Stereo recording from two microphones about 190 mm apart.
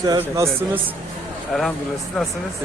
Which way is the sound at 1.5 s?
5° left (ahead or behind).